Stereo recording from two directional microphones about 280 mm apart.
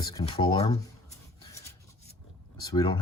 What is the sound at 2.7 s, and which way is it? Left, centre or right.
Speech, centre.